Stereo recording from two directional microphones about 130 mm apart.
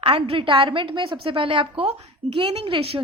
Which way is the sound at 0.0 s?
40° right (ahead or behind).